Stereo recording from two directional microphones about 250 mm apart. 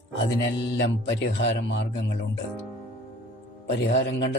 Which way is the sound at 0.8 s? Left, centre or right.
Left.